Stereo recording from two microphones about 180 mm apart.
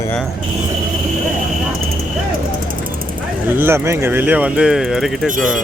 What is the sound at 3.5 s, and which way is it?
Speech, 10° right (ahead or behind).